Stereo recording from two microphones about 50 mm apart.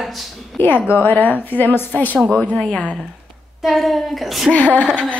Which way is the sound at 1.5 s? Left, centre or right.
Left.